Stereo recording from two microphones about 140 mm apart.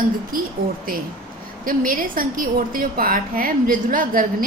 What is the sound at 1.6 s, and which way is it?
A woman's voice, 80° right.